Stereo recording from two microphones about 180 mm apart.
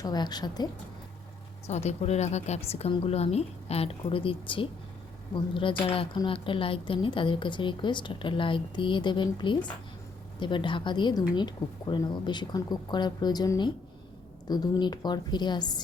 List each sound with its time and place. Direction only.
0.0 s a woman's voice: 25° left (ahead or behind)
1.6 s a woman's voice: 40° left (ahead or behind); by 15.8 s 25° left (ahead or behind)